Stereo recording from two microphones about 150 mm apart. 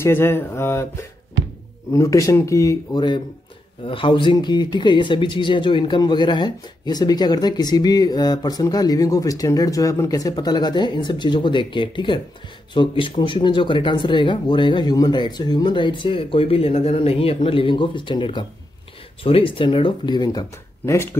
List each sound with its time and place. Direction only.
0.0 s speech: 15° left (ahead or behind)